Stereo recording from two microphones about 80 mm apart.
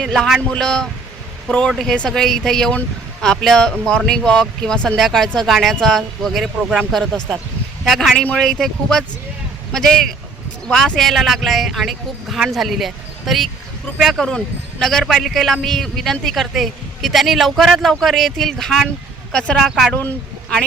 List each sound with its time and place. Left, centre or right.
0.0 s speech: centre
7.9 s speech: centre
8.1 s speech: centre
19.9 s speech: left